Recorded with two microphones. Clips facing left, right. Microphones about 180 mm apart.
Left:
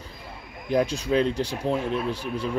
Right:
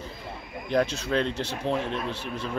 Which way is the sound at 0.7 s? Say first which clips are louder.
Left 2 dB; 10° left (ahead or behind).